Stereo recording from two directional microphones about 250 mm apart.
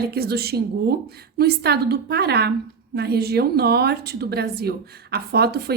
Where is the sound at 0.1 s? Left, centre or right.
Right.